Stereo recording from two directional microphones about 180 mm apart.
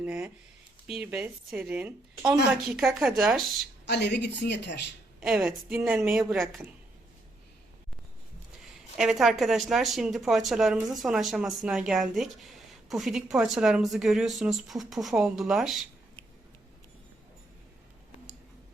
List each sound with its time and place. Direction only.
0.0 s a woman's voice: 10° right (ahead or behind)
3.8 s a woman's voice: 65° left (ahead or behind)
5.2 s a woman's voice: 5° right (ahead or behind)
9.0 s a woman's voice: centre (ahead or behind)